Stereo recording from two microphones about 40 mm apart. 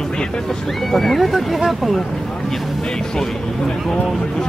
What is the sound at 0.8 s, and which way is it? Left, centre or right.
Speech, centre.